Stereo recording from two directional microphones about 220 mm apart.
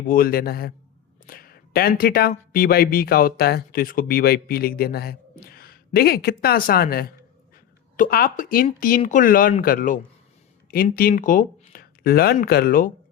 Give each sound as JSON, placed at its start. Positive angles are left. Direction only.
{"t": 0.0, "sound": "speech", "side_deg": 40}